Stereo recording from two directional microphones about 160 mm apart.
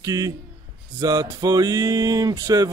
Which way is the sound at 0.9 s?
25° right (ahead or behind).